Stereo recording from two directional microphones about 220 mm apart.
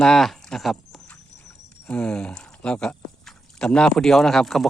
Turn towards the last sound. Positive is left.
turn(degrees=0)  # may be behind; listen again after turning